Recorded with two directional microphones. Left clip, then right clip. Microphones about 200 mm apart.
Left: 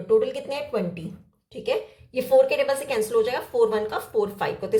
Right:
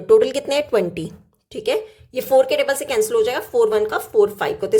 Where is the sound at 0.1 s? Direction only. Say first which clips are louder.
Right 7 dB; 55° right (ahead or behind).